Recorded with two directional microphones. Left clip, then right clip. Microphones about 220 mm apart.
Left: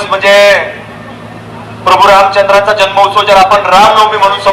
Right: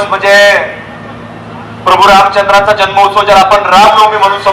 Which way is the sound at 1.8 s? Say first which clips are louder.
Even; 40° left (ahead or behind).